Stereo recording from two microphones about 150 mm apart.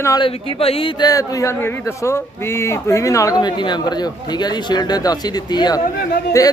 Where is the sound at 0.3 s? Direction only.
40° left (ahead or behind).